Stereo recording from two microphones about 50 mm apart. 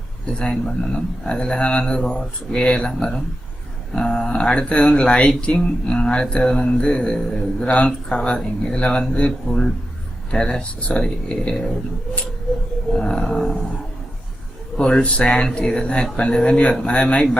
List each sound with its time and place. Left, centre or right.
0.3 s speech: centre
3.9 s mantra: centre
8.4 s speech: centre
8.8 s mantra: centre
13.0 s speech: centre
14.8 s mantra: centre
15.5 s speech: centre
16.8 s mantra: left